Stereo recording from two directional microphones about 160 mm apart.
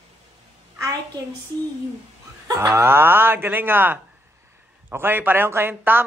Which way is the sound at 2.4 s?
15° right (ahead or behind).